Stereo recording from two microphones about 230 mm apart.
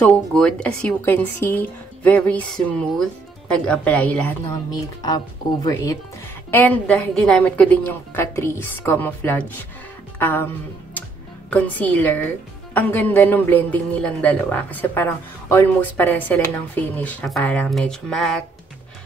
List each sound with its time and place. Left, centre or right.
0.0 s a woman's voice: centre
5.0 s speech: centre
11.5 s speech: centre